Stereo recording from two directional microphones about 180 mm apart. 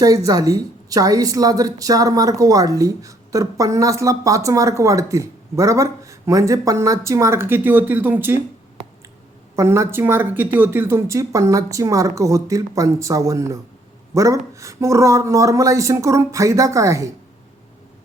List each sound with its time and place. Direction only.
0.0 s a woman's voice: 20° right (ahead or behind)
9.6 s speech: 15° right (ahead or behind)